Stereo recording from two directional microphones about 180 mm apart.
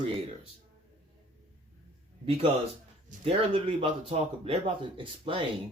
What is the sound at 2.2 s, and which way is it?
Speech, 30° right (ahead or behind).